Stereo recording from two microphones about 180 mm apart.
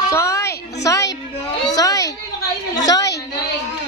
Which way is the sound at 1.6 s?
20° left (ahead or behind).